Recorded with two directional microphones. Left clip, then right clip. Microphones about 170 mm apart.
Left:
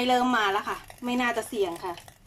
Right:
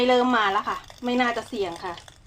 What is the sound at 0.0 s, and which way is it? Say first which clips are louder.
A woman's voice: right 3 dB; 15° left (ahead or behind).